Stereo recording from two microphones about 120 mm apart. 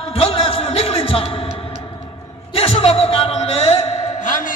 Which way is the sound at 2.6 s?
55° left (ahead or behind).